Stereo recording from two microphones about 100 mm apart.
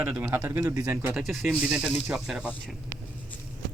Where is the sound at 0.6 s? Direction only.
35° right (ahead or behind).